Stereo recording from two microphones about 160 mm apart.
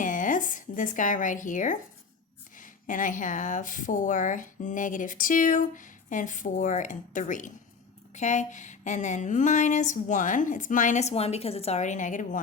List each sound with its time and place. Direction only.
0.0 s speech: 55° left (ahead or behind)